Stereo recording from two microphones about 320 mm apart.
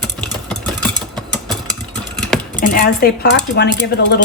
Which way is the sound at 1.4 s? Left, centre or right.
Centre.